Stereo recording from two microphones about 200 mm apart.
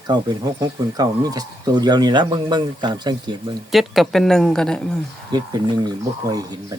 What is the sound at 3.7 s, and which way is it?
Speech, centre (ahead or behind).